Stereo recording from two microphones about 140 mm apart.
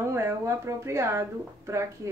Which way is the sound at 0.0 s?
20° right (ahead or behind).